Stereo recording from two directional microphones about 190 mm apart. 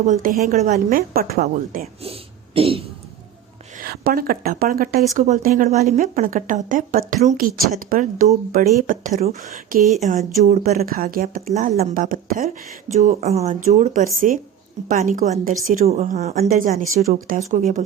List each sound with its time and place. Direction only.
0.0 s a woman's voice: 45° right (ahead or behind)
2.6 s a sound: 30° right (ahead or behind)
3.8 s a woman's voice: 50° right (ahead or behind)
5.6 s a woman's voice: 35° right (ahead or behind)